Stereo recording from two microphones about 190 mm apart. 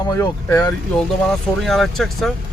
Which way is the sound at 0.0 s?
20° left (ahead or behind).